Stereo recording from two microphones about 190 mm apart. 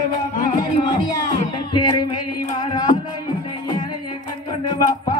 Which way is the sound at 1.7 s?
25° left (ahead or behind).